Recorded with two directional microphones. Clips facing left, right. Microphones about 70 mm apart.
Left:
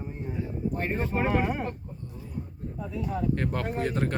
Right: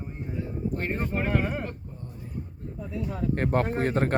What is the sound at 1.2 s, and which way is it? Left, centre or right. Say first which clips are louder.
Speech: left 2 dB; centre.